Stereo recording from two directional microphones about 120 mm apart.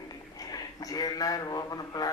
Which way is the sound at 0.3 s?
30° left (ahead or behind).